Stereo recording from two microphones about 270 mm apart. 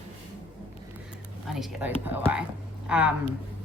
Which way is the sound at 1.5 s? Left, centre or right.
Centre.